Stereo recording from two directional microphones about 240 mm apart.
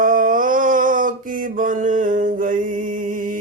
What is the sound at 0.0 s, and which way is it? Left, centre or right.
Mantra, right.